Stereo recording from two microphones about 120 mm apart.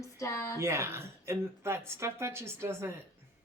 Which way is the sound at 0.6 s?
25° right (ahead or behind).